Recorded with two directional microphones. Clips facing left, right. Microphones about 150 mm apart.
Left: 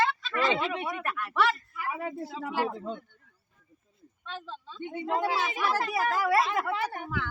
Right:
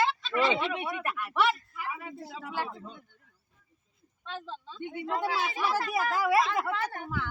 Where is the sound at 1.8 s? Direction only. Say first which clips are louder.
Left 5 dB; 40° left (ahead or behind).